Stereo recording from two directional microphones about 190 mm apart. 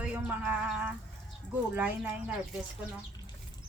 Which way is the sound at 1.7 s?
10° right (ahead or behind).